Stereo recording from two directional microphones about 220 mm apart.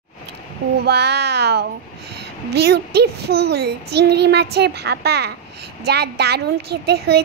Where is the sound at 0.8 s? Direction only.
50° right (ahead or behind).